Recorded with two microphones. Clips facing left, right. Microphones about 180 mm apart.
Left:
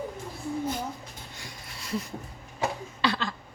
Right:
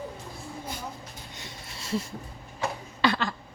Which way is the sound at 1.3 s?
25° right (ahead or behind).